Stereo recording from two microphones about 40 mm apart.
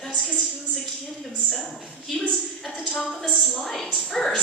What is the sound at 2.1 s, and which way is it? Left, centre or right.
Speech, centre.